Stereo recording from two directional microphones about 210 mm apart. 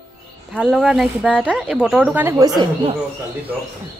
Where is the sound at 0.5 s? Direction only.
5° right (ahead or behind); by 2.9 s 20° right (ahead or behind).